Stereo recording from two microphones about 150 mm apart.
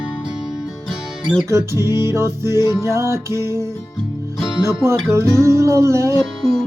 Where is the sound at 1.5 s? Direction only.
20° right (ahead or behind).